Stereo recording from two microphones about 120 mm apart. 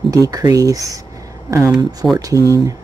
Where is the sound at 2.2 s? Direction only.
30° right (ahead or behind).